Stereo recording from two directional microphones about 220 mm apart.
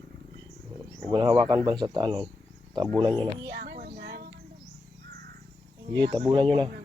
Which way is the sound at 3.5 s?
50° right (ahead or behind).